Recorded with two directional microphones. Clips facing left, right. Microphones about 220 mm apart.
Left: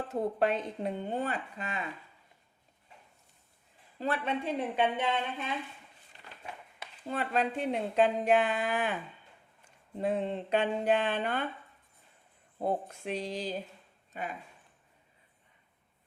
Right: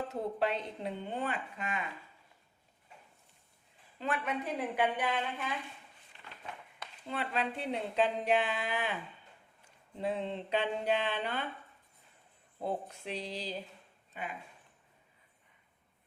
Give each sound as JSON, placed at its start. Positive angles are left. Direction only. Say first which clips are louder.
{"t": 0.1, "sound": "speech", "louder": "left 7 dB", "side_deg": 50}
{"t": 3.9, "sound": "a woman's voice", "louder": "left 3 dB", "side_deg": 35}
{"t": 6.1, "sound": "a sound", "louder": "left 1 dB", "side_deg": 40}
{"t": 7.1, "sound": "speech", "louder": "left 4 dB", "side_deg": 45}
{"t": 10.0, "sound": "speech", "louder": "left 4 dB", "side_deg": 50}
{"t": 12.6, "sound": "speech", "louder": "left 4 dB", "side_deg": 50}